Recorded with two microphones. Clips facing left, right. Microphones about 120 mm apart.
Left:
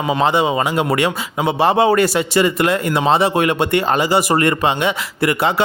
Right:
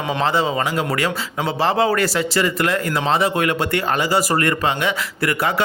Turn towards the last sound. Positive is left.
turn(degrees=25)  # may be behind; listen again after turning